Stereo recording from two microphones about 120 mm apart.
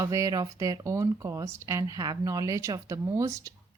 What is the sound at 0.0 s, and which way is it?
Speech, 25° right (ahead or behind).